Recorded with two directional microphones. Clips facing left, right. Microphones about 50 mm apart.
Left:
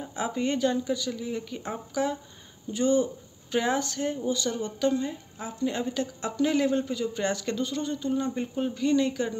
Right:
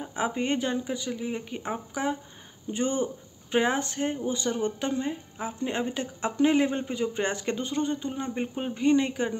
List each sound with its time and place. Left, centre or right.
0.0 s speech: right